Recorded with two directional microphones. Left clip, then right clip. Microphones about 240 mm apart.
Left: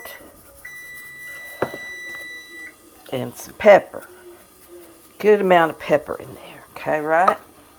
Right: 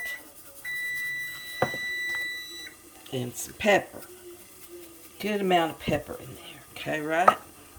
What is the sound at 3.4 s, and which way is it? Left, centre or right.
Speech, left.